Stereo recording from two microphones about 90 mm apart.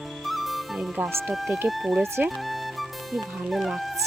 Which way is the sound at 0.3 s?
Centre (ahead or behind).